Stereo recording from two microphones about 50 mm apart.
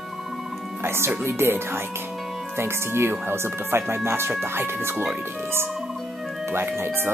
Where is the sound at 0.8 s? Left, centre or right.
Right.